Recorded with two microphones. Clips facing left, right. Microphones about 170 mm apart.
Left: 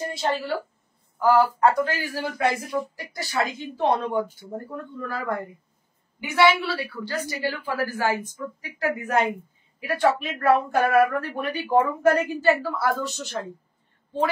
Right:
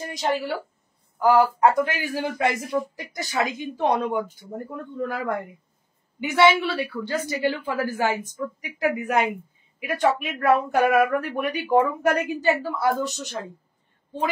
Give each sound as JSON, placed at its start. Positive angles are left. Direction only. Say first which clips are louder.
{"t": 0.1, "sound": "a woman's voice", "louder": "right 4 dB", "side_deg": -15}